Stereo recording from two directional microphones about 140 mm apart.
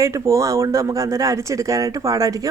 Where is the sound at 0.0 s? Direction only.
20° right (ahead or behind).